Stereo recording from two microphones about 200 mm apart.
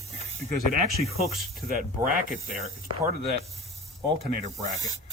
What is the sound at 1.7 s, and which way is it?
Speech, 45° right (ahead or behind).